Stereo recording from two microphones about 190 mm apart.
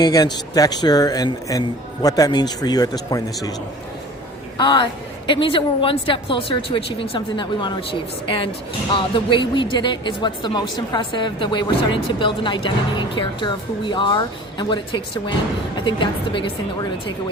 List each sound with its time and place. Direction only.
0.0 s a woman's voice: 20° left (ahead or behind)
4.5 s a woman's voice: 25° left (ahead or behind)
9.0 s a woman's voice: 25° left (ahead or behind)